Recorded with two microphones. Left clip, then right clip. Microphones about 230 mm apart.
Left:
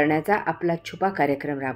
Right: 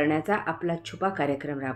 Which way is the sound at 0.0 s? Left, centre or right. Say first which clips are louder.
Left 4 dB; left.